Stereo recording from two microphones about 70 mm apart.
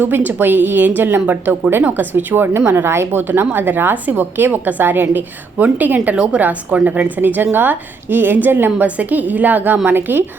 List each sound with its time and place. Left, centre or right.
0.0 s a woman's voice: right